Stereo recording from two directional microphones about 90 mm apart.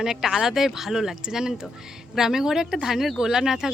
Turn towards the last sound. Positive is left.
turn(degrees=-5)  # may be behind; listen again after turning